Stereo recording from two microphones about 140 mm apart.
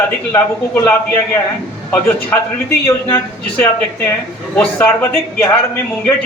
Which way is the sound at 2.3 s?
10° left (ahead or behind).